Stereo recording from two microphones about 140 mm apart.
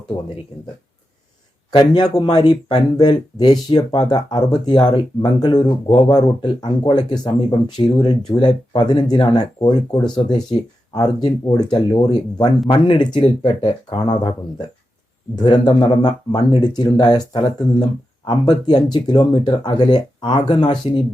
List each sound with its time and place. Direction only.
1.7 s speech: 30° left (ahead or behind)
15.4 s speech: 30° left (ahead or behind)